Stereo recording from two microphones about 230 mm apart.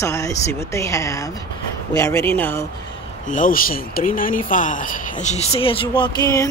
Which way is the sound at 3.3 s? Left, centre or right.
Left.